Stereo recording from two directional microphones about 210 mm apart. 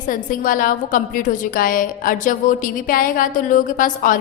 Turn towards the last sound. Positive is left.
turn(degrees=40)  # may be behind; listen again after turning